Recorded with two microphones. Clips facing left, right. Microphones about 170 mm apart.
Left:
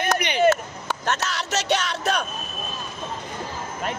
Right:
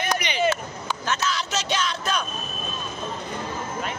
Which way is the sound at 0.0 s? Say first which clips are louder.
Left 3 dB; 55° left (ahead or behind).